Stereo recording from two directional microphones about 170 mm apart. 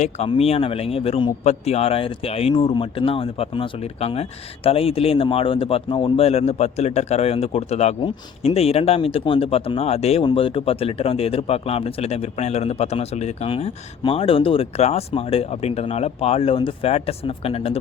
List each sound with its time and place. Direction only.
0.0 s speech: 35° left (ahead or behind)